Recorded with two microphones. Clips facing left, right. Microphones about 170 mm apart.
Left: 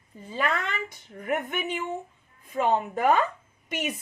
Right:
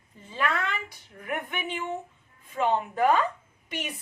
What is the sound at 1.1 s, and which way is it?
A woman's voice, 45° left (ahead or behind).